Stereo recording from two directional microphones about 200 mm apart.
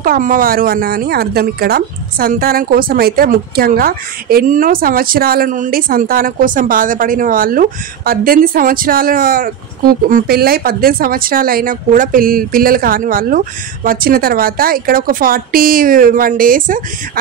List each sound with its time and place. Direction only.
0.0 s speech: 45° right (ahead or behind)